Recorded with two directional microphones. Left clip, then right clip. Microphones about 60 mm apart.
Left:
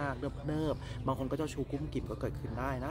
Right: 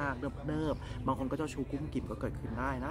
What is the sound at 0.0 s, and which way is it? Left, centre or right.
Speech, left.